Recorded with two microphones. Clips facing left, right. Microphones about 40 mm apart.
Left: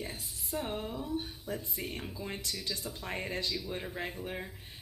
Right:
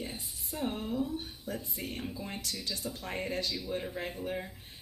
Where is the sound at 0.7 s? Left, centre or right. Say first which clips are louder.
Right 3 dB; left.